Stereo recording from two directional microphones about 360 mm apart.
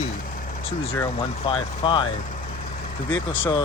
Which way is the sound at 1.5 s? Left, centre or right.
Centre.